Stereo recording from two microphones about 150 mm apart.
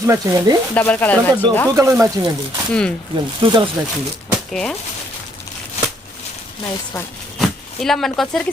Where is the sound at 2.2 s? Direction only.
25° right (ahead or behind).